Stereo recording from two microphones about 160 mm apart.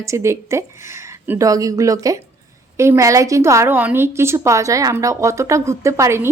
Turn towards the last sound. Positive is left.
turn(degrees=-15)  # may be behind; listen again after turning